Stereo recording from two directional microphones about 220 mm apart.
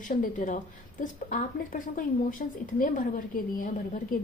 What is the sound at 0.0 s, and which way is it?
Speech, 40° left (ahead or behind).